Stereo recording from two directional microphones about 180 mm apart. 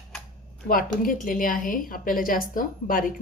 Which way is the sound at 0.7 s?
50° left (ahead or behind).